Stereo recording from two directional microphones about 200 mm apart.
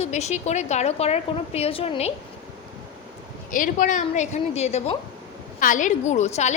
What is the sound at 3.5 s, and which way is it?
A woman's voice, 40° left (ahead or behind).